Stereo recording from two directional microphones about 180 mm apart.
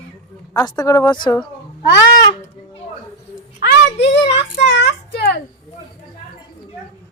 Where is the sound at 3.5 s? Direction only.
70° left (ahead or behind).